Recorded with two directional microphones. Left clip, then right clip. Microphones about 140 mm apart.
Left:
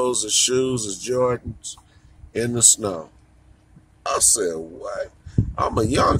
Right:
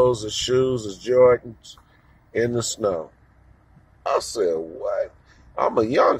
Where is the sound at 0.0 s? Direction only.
15° left (ahead or behind).